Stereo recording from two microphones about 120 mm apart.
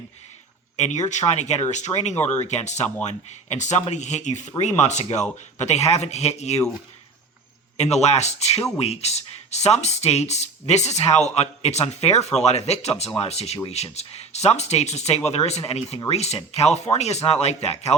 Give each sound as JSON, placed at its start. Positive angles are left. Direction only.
{"t": 0.8, "sound": "speech", "side_deg": 75}
{"t": 7.8, "sound": "speech", "side_deg": 65}